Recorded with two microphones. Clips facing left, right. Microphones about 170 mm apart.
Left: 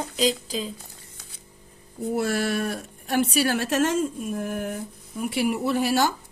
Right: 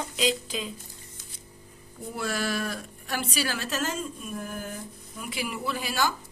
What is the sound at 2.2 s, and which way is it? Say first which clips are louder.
Speech: left 1 dB; 60° left (ahead or behind).